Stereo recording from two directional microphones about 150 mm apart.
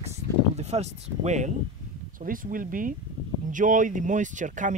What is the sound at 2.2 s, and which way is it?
Speech, 65° right (ahead or behind).